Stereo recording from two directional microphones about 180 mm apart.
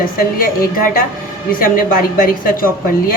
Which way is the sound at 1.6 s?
50° left (ahead or behind).